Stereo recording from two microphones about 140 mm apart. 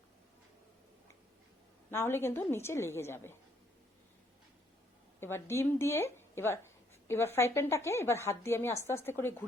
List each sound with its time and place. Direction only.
1.9 s speech: 15° left (ahead or behind)
5.2 s a woman's voice: 15° left (ahead or behind)